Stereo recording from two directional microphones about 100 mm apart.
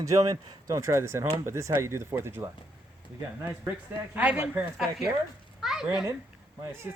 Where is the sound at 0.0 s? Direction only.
35° right (ahead or behind).